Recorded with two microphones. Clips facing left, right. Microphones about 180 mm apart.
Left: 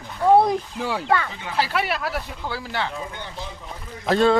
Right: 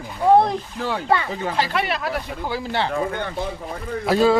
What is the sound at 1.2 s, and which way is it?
Speech, 40° right (ahead or behind).